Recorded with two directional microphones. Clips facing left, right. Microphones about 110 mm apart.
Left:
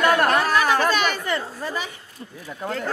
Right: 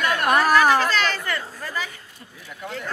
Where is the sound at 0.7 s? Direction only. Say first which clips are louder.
Even; 15° left (ahead or behind).